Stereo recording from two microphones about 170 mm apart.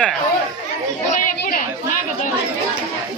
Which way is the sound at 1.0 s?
50° left (ahead or behind).